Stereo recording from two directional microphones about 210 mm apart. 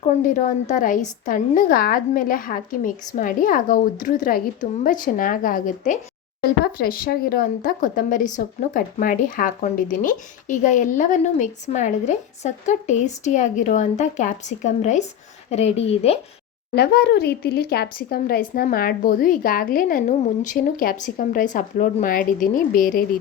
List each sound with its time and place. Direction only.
0.0 s a woman's voice: 35° left (ahead or behind)
16.7 s speech: 50° left (ahead or behind)